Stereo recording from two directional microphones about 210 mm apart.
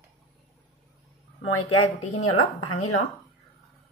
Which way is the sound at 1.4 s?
90° left.